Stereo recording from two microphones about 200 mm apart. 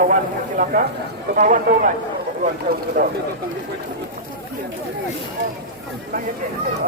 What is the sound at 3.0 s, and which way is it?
Speech, 40° right (ahead or behind).